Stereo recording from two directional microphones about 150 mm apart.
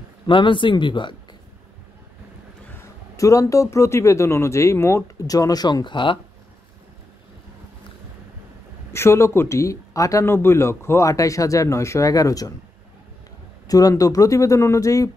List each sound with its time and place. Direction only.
0.3 s speech: 35° left (ahead or behind)
2.7 s speech: 20° left (ahead or behind)
8.9 s speech: 15° left (ahead or behind)
13.7 s speech: 25° left (ahead or behind)